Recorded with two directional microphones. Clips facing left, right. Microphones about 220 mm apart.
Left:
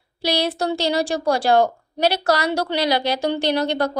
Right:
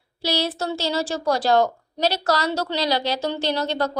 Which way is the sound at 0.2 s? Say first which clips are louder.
Left 3 dB; 15° left (ahead or behind).